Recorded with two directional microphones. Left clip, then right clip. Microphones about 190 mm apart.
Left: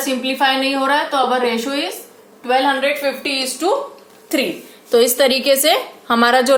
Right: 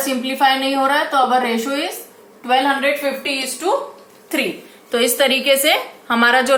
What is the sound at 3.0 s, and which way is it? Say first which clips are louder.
Speech: left 1 dB; 55° left (ahead or behind).